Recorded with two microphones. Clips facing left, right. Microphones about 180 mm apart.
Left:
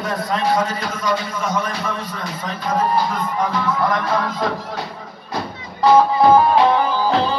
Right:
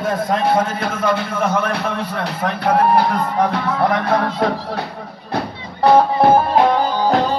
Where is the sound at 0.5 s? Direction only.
55° right (ahead or behind).